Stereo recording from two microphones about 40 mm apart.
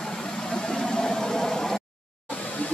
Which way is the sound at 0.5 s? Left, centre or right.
Centre.